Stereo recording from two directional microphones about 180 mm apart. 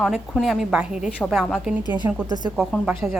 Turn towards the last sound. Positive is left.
turn(degrees=-5)  # may be behind; listen again after turning